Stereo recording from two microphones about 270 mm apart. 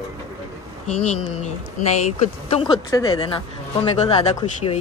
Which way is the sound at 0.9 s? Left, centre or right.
Left.